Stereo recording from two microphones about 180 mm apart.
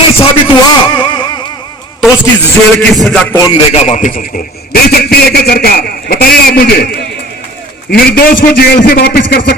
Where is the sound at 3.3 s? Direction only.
20° left (ahead or behind).